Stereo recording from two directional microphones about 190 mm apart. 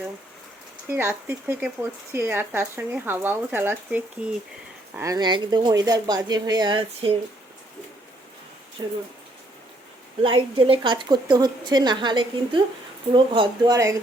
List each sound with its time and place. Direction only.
0.9 s a woman's voice: 10° right (ahead or behind)
8.8 s a woman's voice: 20° right (ahead or behind)
10.2 s a woman's voice: 25° right (ahead or behind)